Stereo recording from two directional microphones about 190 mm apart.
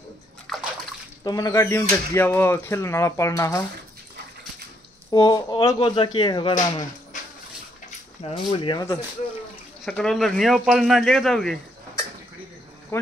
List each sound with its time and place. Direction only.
0.5 s bathtub: centre (ahead or behind)
1.2 s speech: 20° left (ahead or behind)
5.1 s speech: 25° left (ahead or behind)
6.5 s speech: 40° left (ahead or behind)
8.2 s speech: 30° left (ahead or behind)
9.8 s speech: 5° left (ahead or behind)
12.9 s speech: 10° left (ahead or behind)